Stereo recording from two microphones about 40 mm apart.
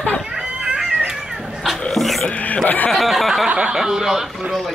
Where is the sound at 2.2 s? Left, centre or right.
Left.